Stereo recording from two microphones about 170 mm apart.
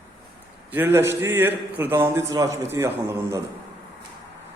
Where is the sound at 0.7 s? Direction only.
10° right (ahead or behind).